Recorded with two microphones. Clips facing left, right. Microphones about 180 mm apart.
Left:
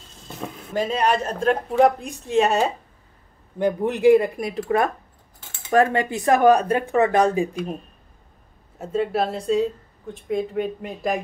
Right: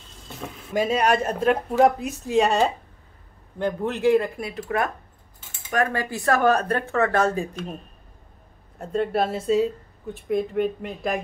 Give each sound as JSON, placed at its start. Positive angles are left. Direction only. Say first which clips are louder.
{"t": 0.7, "sound": "speech", "louder": "right 1 dB", "side_deg": -10}
{"t": 3.5, "sound": "speech", "louder": "left 4 dB", "side_deg": 15}
{"t": 5.7, "sound": "speech", "louder": "left 6 dB", "side_deg": 25}
{"t": 8.7, "sound": "speech", "louder": "left 1 dB", "side_deg": 5}